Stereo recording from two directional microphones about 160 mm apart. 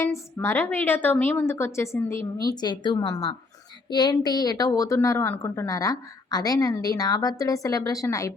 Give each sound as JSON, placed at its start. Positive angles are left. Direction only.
{"t": 0.3, "sound": "a woman's voice", "side_deg": 15}